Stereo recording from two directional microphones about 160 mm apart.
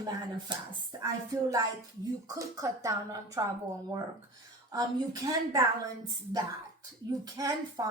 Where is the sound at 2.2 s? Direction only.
20° right (ahead or behind).